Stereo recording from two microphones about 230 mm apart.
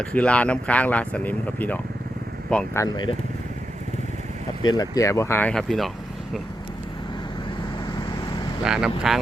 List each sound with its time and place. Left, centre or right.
0.0 s speech: centre
4.6 s speech: centre
7.9 s vehicle: centre
8.6 s speech: centre